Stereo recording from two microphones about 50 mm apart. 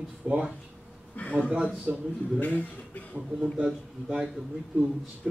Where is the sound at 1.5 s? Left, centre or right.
Right.